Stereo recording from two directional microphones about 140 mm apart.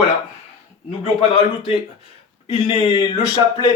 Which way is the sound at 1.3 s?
45° left (ahead or behind).